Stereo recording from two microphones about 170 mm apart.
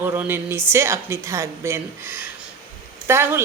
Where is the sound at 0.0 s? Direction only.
15° right (ahead or behind).